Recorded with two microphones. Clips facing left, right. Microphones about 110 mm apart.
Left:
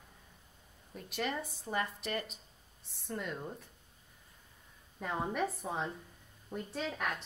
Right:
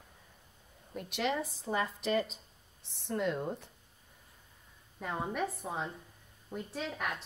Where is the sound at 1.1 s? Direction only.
90° right.